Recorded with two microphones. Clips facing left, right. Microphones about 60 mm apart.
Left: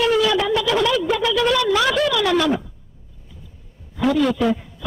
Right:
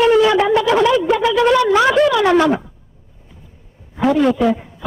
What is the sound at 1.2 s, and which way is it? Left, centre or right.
Speech, right.